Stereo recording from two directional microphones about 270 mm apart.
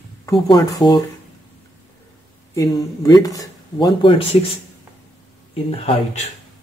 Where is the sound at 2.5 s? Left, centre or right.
Centre.